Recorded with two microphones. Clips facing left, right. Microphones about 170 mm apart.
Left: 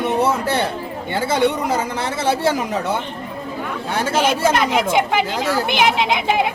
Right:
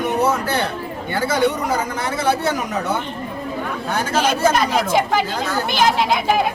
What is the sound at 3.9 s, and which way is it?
Speech, 30° left (ahead or behind).